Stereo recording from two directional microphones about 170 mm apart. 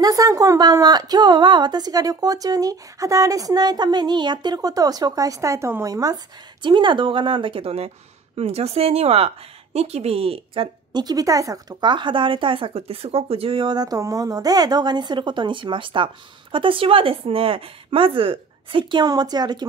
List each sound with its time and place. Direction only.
0.0 s a woman's voice: 20° right (ahead or behind)